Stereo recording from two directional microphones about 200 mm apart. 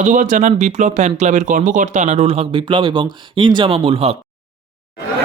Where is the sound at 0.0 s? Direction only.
35° right (ahead or behind).